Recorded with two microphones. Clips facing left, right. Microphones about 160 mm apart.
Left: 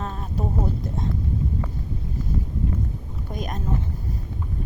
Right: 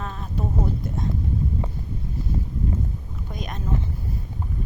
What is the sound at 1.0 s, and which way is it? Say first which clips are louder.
Whispering: even; 30° left (ahead or behind).